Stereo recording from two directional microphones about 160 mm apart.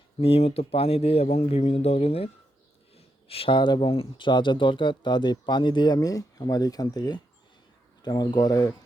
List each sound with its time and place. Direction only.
0.2 s speech: 40° left (ahead or behind); by 8.7 s 20° left (ahead or behind)